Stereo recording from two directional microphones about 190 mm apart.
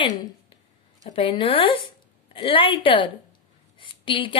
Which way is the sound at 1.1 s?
25° left (ahead or behind).